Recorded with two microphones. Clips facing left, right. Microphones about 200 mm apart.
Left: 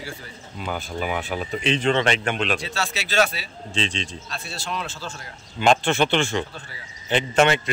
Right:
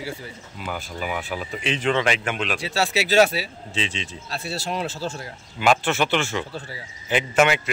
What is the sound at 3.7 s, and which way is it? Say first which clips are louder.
Speech: left 3 dB; 5° right (ahead or behind).